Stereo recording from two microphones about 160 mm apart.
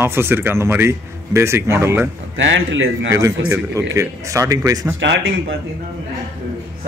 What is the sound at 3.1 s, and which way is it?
Speech, 20° right (ahead or behind).